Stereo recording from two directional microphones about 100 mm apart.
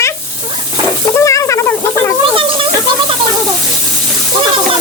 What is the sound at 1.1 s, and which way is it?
Snake, 30° left (ahead or behind).